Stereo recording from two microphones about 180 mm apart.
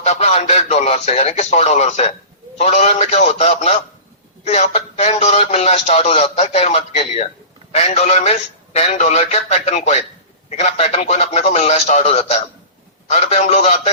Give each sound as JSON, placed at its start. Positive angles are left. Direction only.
{"t": 0.0, "sound": "speech", "side_deg": 40}